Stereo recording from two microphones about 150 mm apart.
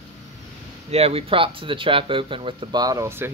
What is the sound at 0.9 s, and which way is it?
Speech, 40° right (ahead or behind).